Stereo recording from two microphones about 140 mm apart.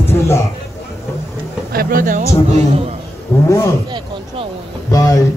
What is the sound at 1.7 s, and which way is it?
A man's voice, 90° right.